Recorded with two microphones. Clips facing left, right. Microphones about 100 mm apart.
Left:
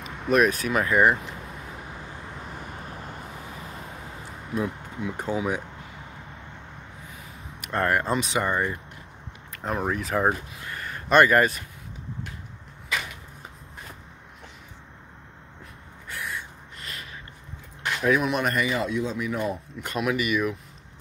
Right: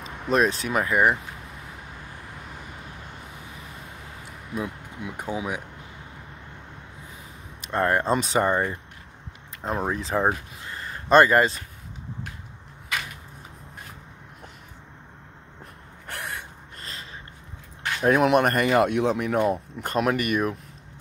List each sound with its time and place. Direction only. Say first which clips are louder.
0.0 s speech: left 1 dB; 25° right (ahead or behind)
5.0 s speech: left 3 dB; 10° right (ahead or behind)
7.6 s speech: right 2 dB; 25° right (ahead or behind)
16.1 s gasp: even; 65° right (ahead or behind)
18.0 s speech: right 5 dB; 55° right (ahead or behind)